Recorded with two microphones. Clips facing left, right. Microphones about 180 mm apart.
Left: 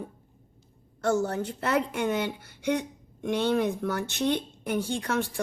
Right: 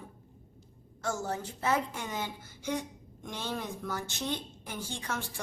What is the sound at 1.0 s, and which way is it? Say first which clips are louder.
Speech: left 8 dB; 65° left (ahead or behind).